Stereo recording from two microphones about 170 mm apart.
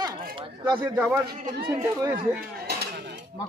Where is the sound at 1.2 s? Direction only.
65° right (ahead or behind).